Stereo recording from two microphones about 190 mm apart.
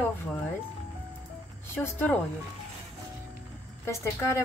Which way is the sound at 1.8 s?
10° left (ahead or behind).